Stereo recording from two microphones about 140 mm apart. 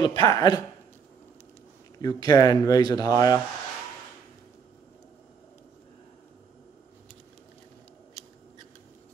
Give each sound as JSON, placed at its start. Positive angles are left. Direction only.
{"t": 0.0, "sound": "speech", "side_deg": 30}
{"t": 2.0, "sound": "speech", "side_deg": 30}